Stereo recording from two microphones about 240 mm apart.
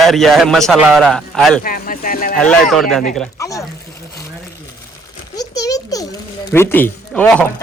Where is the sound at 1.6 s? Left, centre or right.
Left.